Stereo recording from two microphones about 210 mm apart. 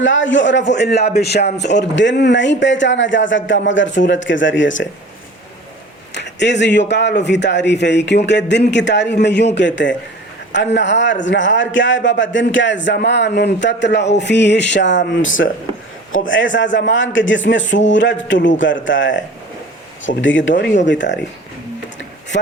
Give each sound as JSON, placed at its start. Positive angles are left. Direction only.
{"t": 0.0, "sound": "a man's voice", "side_deg": 65}
{"t": 6.1, "sound": "a man's voice", "side_deg": 55}